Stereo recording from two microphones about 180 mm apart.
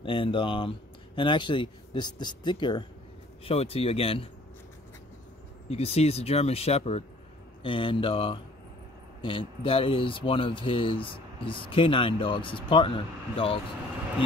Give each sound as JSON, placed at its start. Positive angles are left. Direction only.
{"t": 0.0, "sound": "speech", "side_deg": 30}
{"t": 5.7, "sound": "speech", "side_deg": 35}